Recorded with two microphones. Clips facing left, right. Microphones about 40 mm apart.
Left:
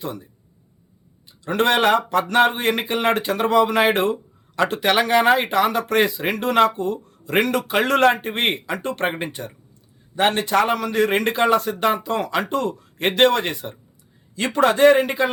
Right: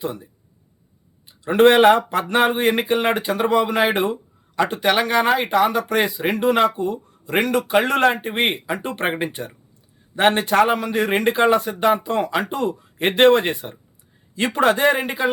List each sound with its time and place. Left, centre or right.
1.3 s speech: right
10.2 s a man's voice: right
10.7 s speech: centre